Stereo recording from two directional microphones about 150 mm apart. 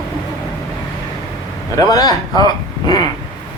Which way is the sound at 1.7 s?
25° left (ahead or behind).